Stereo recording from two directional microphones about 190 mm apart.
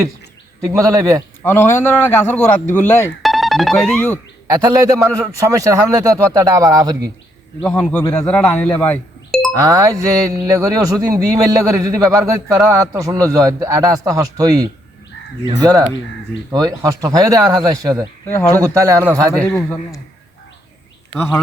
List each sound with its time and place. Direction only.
0.7 s speech: 20° right (ahead or behind)
1.4 s speech: 10° left (ahead or behind)
3.2 s music: centre (ahead or behind)
4.5 s speech: 20° right (ahead or behind)
7.6 s speech: 5° left (ahead or behind)
9.6 s speech: 15° right (ahead or behind)
19.3 s speech: 5° left (ahead or behind)
21.2 s speech: 10° left (ahead or behind)